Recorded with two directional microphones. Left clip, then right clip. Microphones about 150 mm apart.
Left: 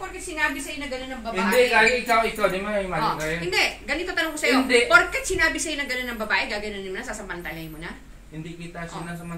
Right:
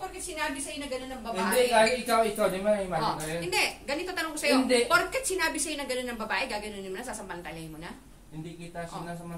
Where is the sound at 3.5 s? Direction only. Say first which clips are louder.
Left 4 dB; 35° right (ahead or behind).